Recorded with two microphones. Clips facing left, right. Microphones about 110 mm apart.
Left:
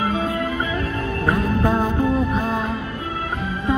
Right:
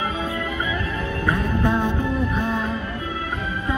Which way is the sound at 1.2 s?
35° left (ahead or behind).